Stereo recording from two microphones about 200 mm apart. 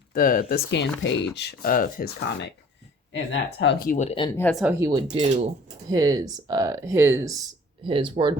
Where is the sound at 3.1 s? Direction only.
65° left (ahead or behind).